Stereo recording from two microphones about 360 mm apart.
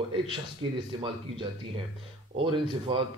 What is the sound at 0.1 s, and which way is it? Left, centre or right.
A man's voice, centre.